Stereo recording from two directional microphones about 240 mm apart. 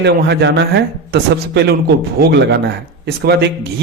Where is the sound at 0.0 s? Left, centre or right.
Right.